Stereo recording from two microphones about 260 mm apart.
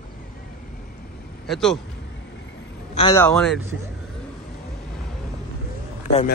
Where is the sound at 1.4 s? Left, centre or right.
Centre.